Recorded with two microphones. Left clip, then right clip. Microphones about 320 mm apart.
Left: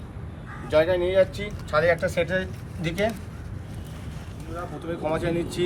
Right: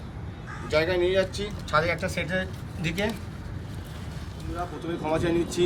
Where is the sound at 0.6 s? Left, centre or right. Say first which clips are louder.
Left 3 dB; centre.